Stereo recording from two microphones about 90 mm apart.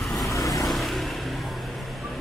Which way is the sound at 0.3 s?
40° left (ahead or behind).